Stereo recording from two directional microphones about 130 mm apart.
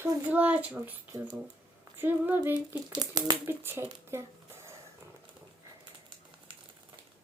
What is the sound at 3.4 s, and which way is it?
Speech, 20° right (ahead or behind).